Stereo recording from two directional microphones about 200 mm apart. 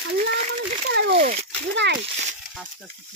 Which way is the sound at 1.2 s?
40° right (ahead or behind).